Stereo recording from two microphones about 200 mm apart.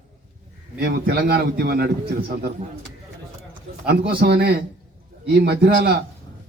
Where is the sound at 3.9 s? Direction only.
50° right (ahead or behind).